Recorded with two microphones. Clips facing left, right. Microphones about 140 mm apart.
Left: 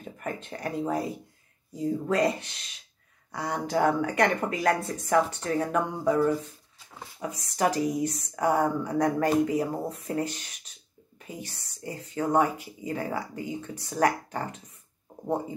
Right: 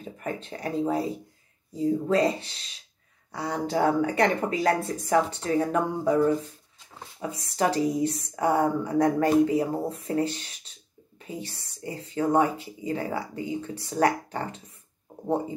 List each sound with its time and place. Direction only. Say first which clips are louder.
0.0 s a woman's voice: right 2 dB; 30° right (ahead or behind)